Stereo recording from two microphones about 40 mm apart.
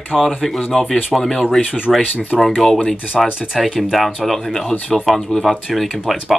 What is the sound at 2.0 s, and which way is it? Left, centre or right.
Speech, left.